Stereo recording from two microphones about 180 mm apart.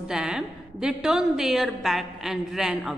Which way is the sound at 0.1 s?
5° right (ahead or behind).